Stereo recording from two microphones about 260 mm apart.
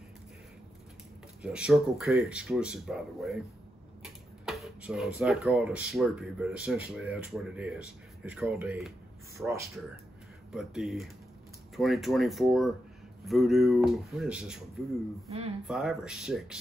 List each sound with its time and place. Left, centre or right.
1.4 s speech: centre
4.0 s arrow: centre
5.2 s speech: centre
15.2 s speech: right
15.6 s speech: centre